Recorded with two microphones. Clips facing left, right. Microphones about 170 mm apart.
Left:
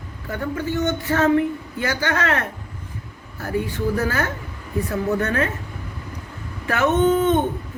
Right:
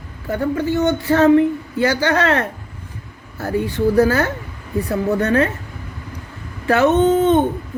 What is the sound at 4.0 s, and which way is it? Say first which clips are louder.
Speech: right 8 dB; 35° right (ahead or behind).